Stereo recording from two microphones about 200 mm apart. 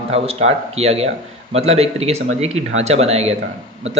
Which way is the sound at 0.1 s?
30° right (ahead or behind).